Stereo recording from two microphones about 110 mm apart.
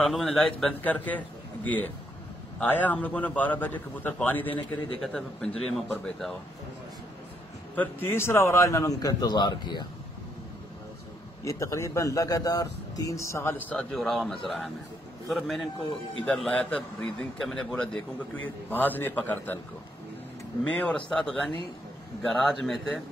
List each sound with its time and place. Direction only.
0.0 s speech: centre (ahead or behind)
0.8 s a man's voice: 15° left (ahead or behind)
7.7 s speech: 20° left (ahead or behind); by 9.8 s 40° left (ahead or behind)
11.4 s speech: 30° left (ahead or behind)
13.9 s a man's voice: centre (ahead or behind)
20.6 s a man's voice: 10° left (ahead or behind)